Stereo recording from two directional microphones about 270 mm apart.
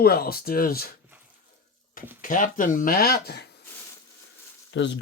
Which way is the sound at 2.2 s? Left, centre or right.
Left.